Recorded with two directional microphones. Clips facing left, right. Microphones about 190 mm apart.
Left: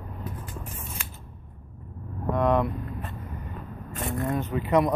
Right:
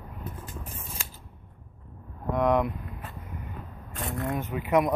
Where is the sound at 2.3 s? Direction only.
15° right (ahead or behind).